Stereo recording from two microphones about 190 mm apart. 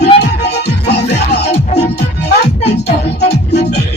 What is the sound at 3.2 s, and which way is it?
Music, 60° left (ahead or behind).